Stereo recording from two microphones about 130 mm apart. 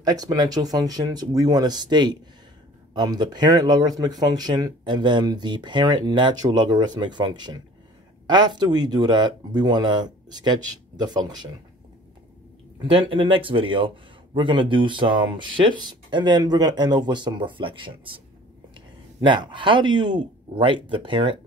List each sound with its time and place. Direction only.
0.0 s speech: 30° right (ahead or behind)
12.7 s speech: 40° right (ahead or behind)
19.2 s speech: 40° right (ahead or behind)